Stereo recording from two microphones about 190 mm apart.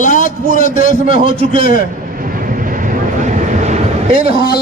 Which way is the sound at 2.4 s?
45° right (ahead or behind).